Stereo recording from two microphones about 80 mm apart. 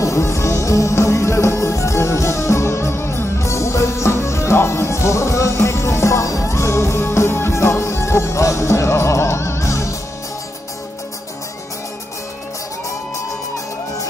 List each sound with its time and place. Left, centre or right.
0.0 s music: left